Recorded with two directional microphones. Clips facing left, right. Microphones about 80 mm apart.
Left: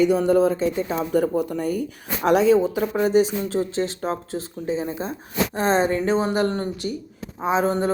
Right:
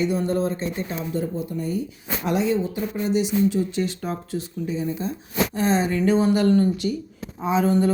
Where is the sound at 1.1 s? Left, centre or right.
Left.